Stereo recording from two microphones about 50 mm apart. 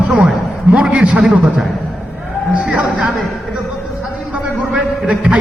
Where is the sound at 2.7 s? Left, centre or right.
Right.